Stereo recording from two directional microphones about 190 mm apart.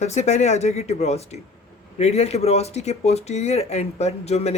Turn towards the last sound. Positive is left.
turn(degrees=35)  # may be behind; listen again after turning